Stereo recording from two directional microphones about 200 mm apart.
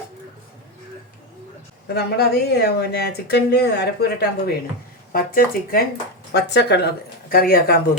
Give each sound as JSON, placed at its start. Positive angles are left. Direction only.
{"t": 1.9, "sound": "speech", "side_deg": 50}
{"t": 6.3, "sound": "speech", "side_deg": 55}